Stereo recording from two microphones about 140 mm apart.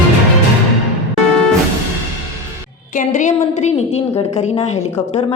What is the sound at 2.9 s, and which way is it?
A woman's voice, 65° left (ahead or behind).